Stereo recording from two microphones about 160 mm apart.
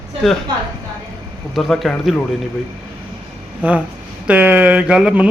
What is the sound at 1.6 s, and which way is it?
Speech, centre (ahead or behind).